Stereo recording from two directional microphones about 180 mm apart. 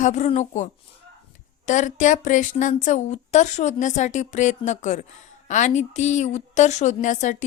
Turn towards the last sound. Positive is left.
turn(degrees=45)  # may be behind; listen again after turning